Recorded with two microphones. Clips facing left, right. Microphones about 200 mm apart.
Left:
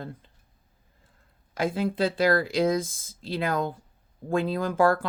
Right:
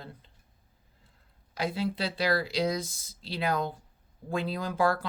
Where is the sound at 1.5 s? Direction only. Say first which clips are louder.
Left 4 dB; 50° left (ahead or behind).